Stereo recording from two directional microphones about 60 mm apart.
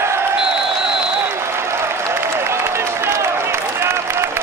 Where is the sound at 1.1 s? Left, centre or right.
Right.